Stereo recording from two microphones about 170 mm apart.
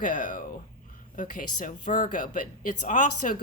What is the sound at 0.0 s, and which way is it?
Speech, 50° left (ahead or behind).